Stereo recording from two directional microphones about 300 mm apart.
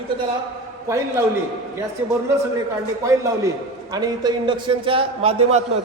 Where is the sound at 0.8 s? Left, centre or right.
Centre.